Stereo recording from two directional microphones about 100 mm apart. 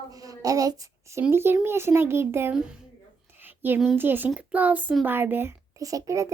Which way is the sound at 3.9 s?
20° right (ahead or behind).